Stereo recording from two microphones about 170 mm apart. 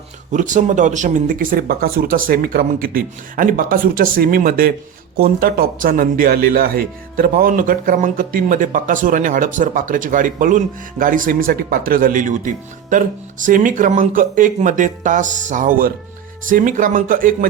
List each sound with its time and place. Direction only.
0.3 s a man's voice: 50° right (ahead or behind)